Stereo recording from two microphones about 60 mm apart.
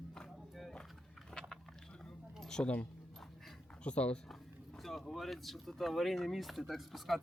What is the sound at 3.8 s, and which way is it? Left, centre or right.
Speech, centre.